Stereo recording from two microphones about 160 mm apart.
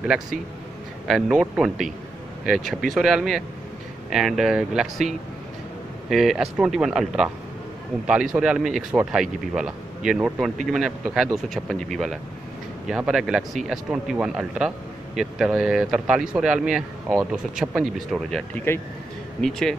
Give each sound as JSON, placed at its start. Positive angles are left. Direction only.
{"t": 0.0, "sound": "speech", "side_deg": -5}